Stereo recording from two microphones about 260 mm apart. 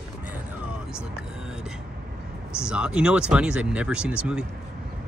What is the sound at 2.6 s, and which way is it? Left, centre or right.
Speech, centre.